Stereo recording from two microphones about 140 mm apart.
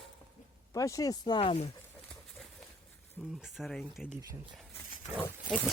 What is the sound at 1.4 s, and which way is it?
Speech, 45° left (ahead or behind).